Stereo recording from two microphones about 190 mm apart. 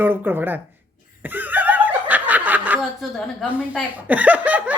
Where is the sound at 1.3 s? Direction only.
10° right (ahead or behind).